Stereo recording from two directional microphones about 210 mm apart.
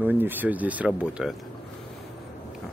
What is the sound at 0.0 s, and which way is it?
Speech, 10° right (ahead or behind).